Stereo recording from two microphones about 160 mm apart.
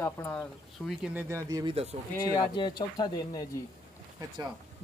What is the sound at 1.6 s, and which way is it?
Speech, 40° right (ahead or behind).